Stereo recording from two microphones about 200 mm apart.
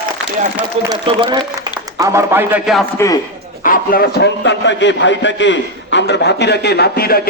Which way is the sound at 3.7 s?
45° left (ahead or behind).